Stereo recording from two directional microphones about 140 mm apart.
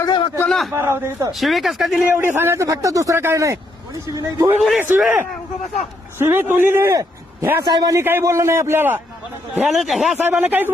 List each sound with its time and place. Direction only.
0.3 s a sound: 5° left (ahead or behind)
0.7 s speech: 20° right (ahead or behind)
1.3 s speech: centre (ahead or behind)
2.1 s speech: 15° right (ahead or behind)
4.9 s a man's voice: 5° right (ahead or behind); by 7.9 s 30° right (ahead or behind)
7.9 s a man's voice: 15° right (ahead or behind)
9.6 s speech: centre (ahead or behind)
10.2 s a man's voice: 15° right (ahead or behind)